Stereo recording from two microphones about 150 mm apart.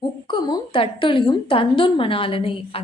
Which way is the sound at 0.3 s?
30° left (ahead or behind).